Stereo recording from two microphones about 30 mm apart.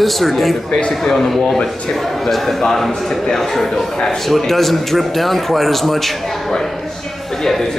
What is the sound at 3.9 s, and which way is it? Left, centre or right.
Speech, centre.